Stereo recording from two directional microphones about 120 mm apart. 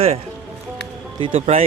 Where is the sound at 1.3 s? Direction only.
70° right (ahead or behind).